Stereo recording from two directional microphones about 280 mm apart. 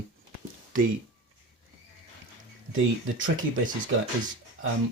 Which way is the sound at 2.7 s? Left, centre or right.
Right.